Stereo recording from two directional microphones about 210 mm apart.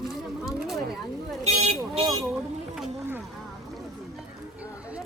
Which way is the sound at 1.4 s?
30° right (ahead or behind).